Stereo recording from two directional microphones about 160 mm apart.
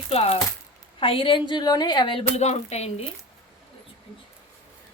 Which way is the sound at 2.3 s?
45° left (ahead or behind).